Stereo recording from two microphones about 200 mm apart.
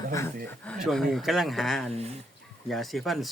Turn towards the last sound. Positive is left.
turn(degrees=0)  # may be behind; listen again after turning